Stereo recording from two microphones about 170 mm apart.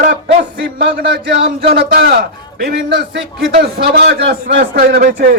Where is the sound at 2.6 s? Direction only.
65° right (ahead or behind).